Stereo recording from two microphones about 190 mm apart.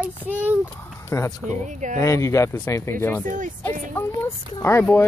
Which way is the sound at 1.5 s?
40° right (ahead or behind).